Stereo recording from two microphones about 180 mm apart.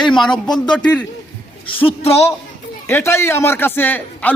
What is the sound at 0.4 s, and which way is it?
Speech, 25° left (ahead or behind).